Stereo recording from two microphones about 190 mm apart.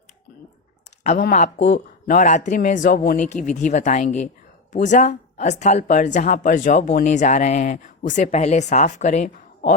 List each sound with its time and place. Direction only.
1.2 s speech: 40° left (ahead or behind)